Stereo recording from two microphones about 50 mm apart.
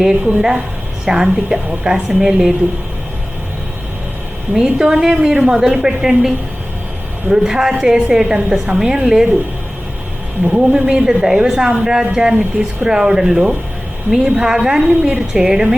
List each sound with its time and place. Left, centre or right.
0.3 s a woman's voice: centre
4.5 s a woman's voice: centre
10.4 s a woman's voice: centre